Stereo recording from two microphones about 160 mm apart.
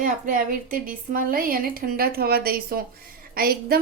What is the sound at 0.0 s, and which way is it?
A woman's voice, 55° right (ahead or behind).